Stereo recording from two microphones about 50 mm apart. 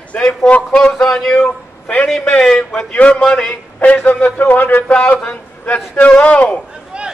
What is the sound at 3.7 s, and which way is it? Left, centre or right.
A man's voice, left.